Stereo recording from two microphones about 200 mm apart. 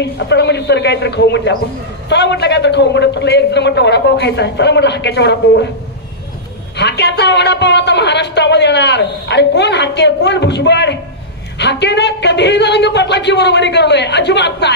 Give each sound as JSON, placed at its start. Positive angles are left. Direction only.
{"t": 0.0, "sound": "speech", "side_deg": 60}
{"t": 6.8, "sound": "speech", "side_deg": 60}